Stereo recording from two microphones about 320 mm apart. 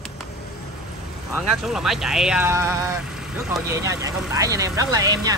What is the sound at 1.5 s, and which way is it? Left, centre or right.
Speech, centre.